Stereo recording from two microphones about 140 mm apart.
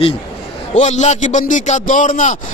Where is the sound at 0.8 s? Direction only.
55° left (ahead or behind).